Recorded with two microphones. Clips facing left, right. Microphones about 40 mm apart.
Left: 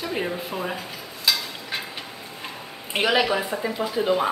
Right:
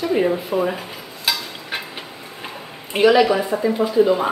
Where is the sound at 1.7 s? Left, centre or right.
Right.